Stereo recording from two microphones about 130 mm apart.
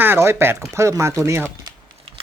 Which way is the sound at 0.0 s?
20° right (ahead or behind).